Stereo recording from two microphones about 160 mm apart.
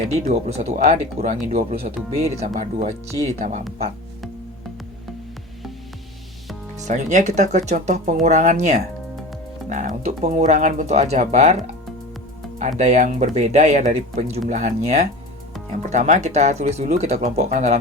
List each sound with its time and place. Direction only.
0.1 s speech: 45° right (ahead or behind)
6.8 s speech: 50° right (ahead or behind)